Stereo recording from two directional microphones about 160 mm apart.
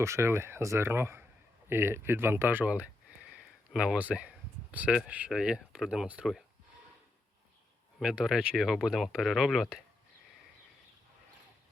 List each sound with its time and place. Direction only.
0.0 s speech: 15° right (ahead or behind)
8.0 s speech: 5° right (ahead or behind)